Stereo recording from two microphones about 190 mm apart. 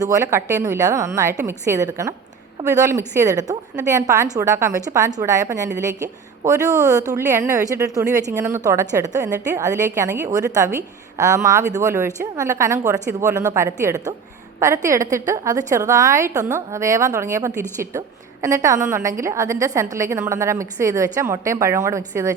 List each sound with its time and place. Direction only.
0.0 s a woman's voice: 15° right (ahead or behind)